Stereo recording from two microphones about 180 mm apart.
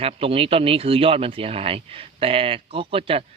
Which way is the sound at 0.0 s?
30° right (ahead or behind).